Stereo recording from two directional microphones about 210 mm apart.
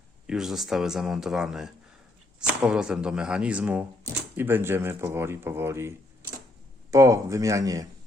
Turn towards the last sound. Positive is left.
turn(degrees=-15)  # may be behind; listen again after turning